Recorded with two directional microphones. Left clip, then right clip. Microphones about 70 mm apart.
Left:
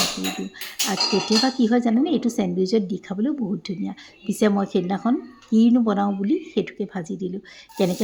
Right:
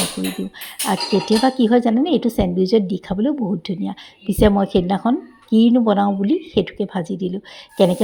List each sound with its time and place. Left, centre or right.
0.9 s speech: right